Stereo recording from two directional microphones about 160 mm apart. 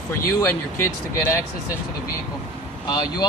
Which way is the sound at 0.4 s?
15° left (ahead or behind).